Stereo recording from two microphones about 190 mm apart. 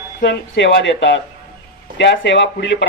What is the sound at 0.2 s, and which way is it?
A man's voice, 65° left (ahead or behind).